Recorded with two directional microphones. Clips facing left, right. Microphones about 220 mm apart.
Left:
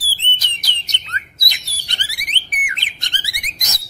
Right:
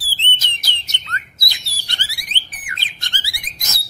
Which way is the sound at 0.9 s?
20° left (ahead or behind).